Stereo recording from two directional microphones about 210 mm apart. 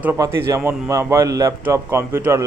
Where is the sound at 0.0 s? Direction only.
10° right (ahead or behind).